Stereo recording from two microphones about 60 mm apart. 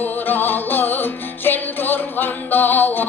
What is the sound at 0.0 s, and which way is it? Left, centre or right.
Music, left.